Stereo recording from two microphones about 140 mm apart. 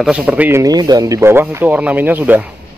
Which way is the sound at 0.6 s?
30° right (ahead or behind).